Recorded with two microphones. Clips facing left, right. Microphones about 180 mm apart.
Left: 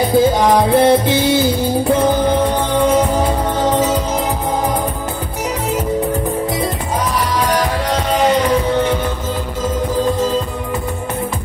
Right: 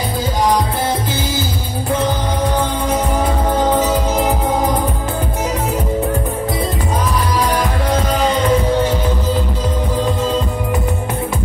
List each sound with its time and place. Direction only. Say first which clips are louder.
0.7 s music: left 8 dB; 70° left (ahead or behind)